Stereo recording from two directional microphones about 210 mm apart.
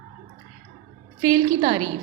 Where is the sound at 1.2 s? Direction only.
20° right (ahead or behind).